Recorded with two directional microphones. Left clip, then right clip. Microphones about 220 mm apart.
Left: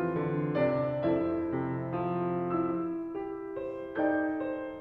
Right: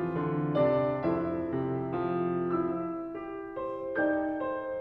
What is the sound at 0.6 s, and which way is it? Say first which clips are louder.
Music: right 2 dB; 5° right (ahead or behind).